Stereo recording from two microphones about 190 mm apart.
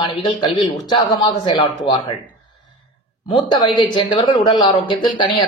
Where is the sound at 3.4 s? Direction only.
25° left (ahead or behind).